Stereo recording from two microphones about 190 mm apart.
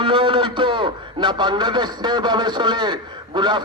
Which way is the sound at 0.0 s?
25° right (ahead or behind).